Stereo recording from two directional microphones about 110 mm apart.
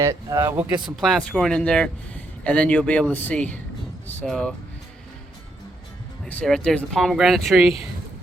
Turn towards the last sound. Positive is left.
turn(degrees=0)  # may be behind; listen again after turning